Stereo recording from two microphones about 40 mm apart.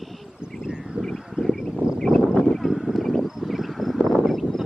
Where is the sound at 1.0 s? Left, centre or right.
Centre.